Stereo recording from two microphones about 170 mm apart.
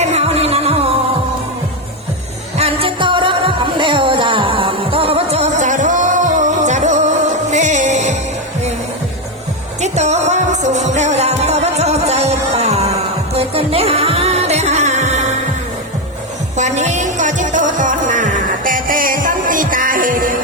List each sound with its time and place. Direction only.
0.0 s music: 40° right (ahead or behind)
2.6 s music: 35° right (ahead or behind)
9.8 s music: 40° right (ahead or behind)
16.6 s music: 45° right (ahead or behind)